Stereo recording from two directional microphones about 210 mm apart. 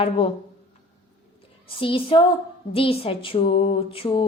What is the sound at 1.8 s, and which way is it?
A woman's voice, 25° left (ahead or behind).